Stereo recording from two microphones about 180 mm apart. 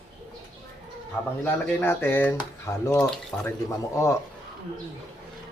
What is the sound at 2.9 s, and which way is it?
Speech, 5° left (ahead or behind).